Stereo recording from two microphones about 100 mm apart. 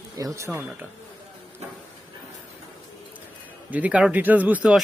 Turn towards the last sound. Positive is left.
turn(degrees=-10)  # may be behind; listen again after turning